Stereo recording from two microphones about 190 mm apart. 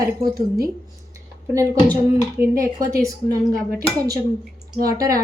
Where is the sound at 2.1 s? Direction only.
15° right (ahead or behind).